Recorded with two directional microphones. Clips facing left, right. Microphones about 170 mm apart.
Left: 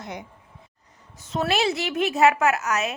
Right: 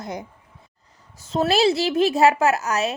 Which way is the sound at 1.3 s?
35° right (ahead or behind).